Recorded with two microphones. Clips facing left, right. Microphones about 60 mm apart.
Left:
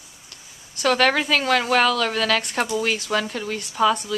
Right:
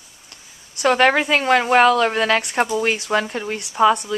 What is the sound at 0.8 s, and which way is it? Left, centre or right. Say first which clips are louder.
A woman's voice: right 3 dB; right.